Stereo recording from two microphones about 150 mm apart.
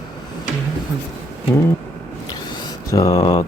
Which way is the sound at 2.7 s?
25° left (ahead or behind).